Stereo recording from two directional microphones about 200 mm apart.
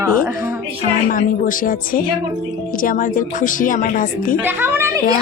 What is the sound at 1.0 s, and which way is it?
A woman's voice, 45° left (ahead or behind).